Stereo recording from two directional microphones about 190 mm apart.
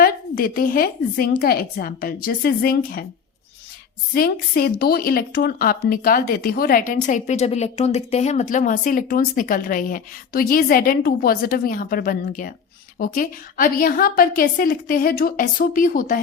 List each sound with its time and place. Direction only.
0.0 s speech: 50° left (ahead or behind)
4.1 s speech: 50° left (ahead or behind)